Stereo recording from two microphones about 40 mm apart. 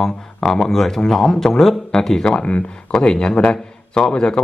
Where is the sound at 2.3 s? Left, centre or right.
Left.